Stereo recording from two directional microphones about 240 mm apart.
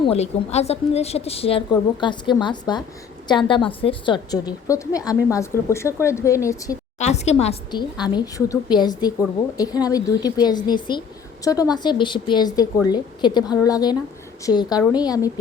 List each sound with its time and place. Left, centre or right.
0.0 s a woman's voice: left
7.0 s a woman's voice: left